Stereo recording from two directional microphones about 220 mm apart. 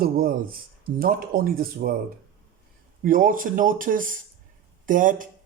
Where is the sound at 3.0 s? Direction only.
40° right (ahead or behind).